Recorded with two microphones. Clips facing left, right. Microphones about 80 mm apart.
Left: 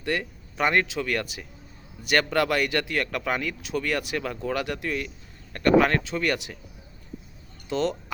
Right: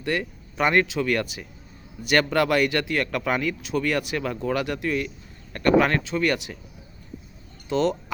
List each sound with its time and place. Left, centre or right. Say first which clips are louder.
0.0 s speech: right 2 dB; right
7.7 s speech: right 3 dB; right